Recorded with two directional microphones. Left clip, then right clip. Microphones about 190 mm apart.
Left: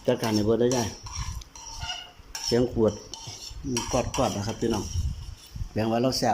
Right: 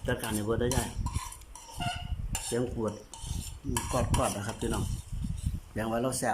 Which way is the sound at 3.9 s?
5° left (ahead or behind).